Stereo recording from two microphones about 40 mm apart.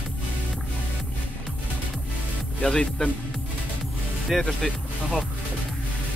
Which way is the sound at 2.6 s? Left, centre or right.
Centre.